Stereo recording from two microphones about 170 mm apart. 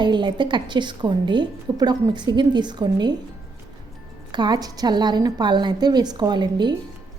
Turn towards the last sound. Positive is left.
turn(degrees=-25)  # may be behind; listen again after turning